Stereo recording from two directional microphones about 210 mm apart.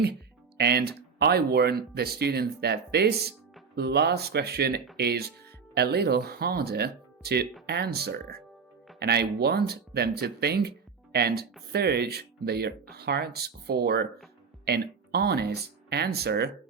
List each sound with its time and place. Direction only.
0.0 s speech: 50° right (ahead or behind)